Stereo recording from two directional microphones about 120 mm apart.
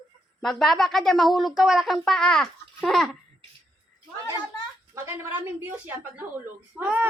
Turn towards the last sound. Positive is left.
turn(degrees=-15)  # may be behind; listen again after turning